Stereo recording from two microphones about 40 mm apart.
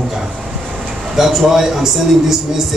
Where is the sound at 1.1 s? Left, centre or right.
Centre.